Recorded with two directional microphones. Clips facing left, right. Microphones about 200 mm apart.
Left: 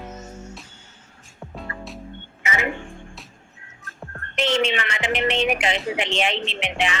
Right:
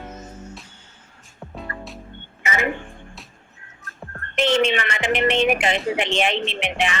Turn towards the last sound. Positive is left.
turn(degrees=-50)  # may be behind; listen again after turning